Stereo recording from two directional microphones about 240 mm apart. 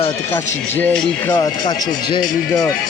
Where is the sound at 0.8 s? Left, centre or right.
Centre.